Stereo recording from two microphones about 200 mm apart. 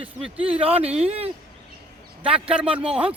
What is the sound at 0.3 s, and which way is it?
Speech, 30° right (ahead or behind).